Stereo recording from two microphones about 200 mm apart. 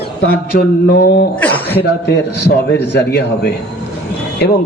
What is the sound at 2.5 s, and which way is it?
A man's voice, 55° left (ahead or behind).